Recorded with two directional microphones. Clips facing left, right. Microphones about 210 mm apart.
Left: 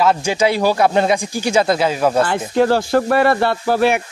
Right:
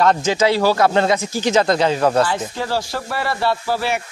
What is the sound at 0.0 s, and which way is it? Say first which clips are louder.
Speech: even; 15° left (ahead or behind).